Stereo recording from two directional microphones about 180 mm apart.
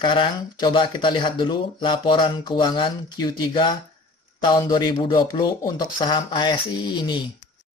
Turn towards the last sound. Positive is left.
turn(degrees=25)  # may be behind; listen again after turning